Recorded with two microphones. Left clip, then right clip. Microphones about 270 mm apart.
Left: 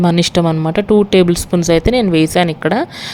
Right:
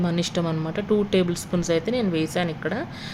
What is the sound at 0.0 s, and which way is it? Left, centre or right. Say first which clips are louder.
Speech: left 12 dB; left.